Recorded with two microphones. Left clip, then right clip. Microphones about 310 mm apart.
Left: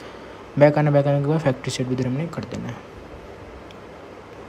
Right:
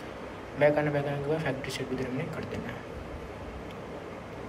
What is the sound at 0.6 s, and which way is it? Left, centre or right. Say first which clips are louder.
A man's voice: left 9 dB; centre.